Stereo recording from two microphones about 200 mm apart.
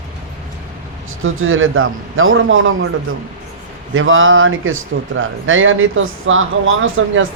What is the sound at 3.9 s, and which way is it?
Speech, 80° right.